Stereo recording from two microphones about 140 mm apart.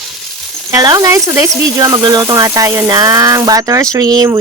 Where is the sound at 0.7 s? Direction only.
25° right (ahead or behind).